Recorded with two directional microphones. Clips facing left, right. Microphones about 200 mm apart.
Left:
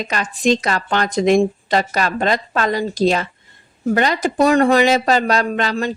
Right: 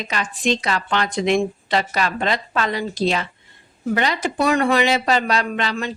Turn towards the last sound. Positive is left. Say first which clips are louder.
# left 4 dB
turn(degrees=40)  # may be behind; listen again after turning